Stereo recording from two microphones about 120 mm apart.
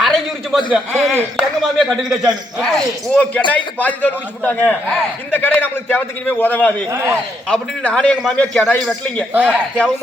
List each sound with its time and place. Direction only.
0.0 s a sound: centre (ahead or behind)
0.7 s a man's voice: 5° right (ahead or behind); by 6.8 s 10° left (ahead or behind)
6.9 s a man's voice: 20° right (ahead or behind)
7.4 s a man's voice: 5° left (ahead or behind)
8.8 s a man's voice: centre (ahead or behind)
9.3 s a man's voice: 10° right (ahead or behind)